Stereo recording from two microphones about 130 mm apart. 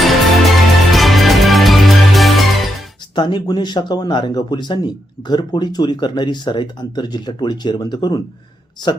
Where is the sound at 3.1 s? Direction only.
35° left (ahead or behind).